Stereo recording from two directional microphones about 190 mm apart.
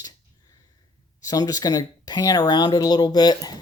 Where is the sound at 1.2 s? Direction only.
20° left (ahead or behind).